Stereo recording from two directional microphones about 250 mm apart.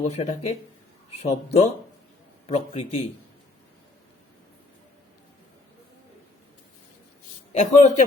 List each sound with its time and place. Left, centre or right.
0.0 s speech: left
7.5 s speech: left